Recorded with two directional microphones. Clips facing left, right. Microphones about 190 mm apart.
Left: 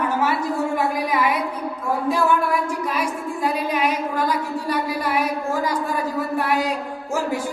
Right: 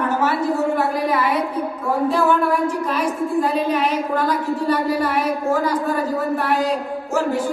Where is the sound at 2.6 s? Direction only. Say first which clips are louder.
Right 4 dB; 10° left (ahead or behind).